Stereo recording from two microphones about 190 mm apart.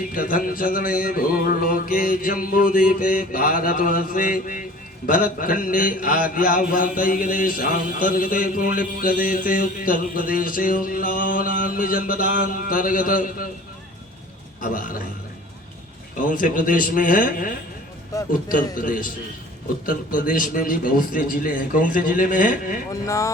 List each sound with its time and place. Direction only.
0.1 s a man's voice: 45° left (ahead or behind)
14.6 s a man's voice: 45° left (ahead or behind)
16.3 s a man's voice: 45° left (ahead or behind)
18.8 s a man's voice: 45° left (ahead or behind)
22.9 s speech: 15° left (ahead or behind)